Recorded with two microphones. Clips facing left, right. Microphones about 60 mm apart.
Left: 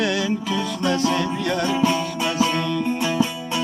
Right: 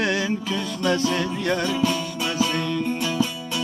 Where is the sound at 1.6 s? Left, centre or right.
Left.